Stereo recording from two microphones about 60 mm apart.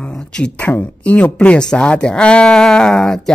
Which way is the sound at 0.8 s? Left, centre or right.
Left.